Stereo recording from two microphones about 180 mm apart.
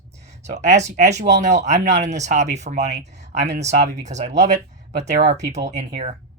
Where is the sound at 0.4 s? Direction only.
40° right (ahead or behind); by 5.7 s 60° right (ahead or behind).